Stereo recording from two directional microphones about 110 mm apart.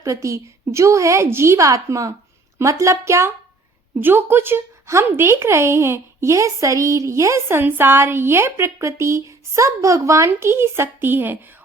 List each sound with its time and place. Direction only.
0.0 s speech: 30° right (ahead or behind)